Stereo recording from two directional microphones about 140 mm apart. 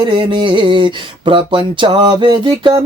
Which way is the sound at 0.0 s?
35° right (ahead or behind).